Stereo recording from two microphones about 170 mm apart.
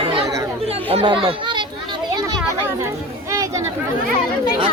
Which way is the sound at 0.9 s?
35° right (ahead or behind).